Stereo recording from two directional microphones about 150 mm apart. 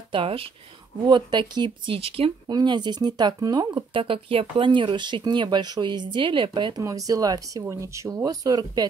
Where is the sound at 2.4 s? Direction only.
30° right (ahead or behind).